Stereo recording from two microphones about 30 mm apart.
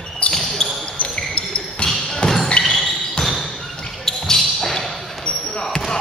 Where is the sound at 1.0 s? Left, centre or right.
Left.